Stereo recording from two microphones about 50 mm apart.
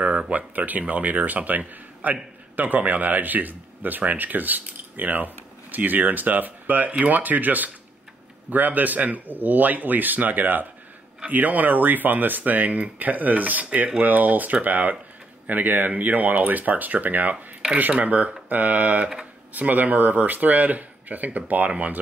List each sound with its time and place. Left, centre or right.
0.0 s speech: right